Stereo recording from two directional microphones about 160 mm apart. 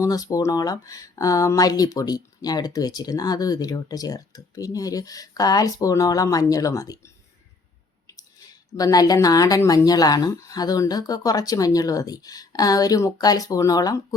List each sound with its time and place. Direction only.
0.0 s speech: 20° left (ahead or behind)
8.7 s speech: 25° left (ahead or behind)